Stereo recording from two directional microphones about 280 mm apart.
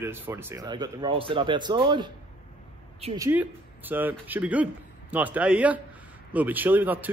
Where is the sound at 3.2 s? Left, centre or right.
Centre.